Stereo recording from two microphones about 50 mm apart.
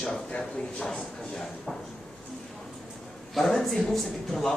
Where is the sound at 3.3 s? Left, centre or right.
Centre.